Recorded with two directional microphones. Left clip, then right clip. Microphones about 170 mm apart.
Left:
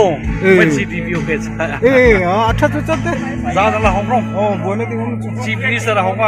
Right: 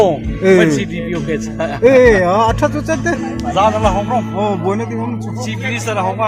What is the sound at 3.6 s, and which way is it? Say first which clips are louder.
Music: right 1 dB; 20° right (ahead or behind).